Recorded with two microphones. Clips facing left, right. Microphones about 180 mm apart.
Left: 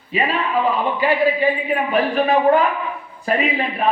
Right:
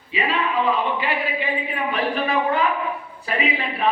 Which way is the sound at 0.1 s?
45° left (ahead or behind).